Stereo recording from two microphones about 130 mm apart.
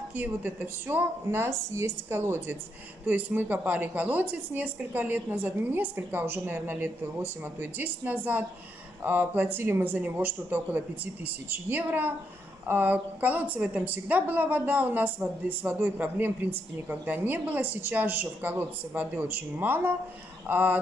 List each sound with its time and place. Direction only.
0.1 s a woman's voice: 15° right (ahead or behind)